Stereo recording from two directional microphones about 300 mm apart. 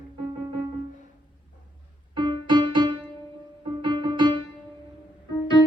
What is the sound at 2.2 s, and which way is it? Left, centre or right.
Music, centre.